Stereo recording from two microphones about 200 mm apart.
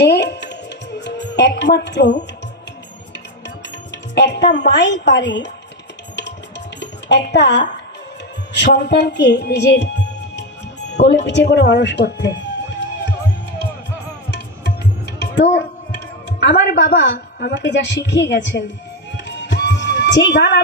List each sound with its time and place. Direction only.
0.0 s music: 55° left (ahead or behind)
4.1 s a woman's voice: 60° left (ahead or behind)
6.7 s speech: 60° left (ahead or behind)
14.6 s music: 55° left (ahead or behind)
16.4 s a woman's voice: 55° left (ahead or behind)
19.1 s music: 65° left (ahead or behind)